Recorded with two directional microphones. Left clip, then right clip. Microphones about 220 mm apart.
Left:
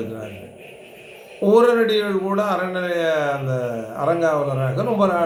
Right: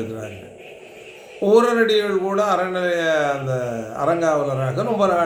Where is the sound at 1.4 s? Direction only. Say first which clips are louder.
Even; 5° right (ahead or behind).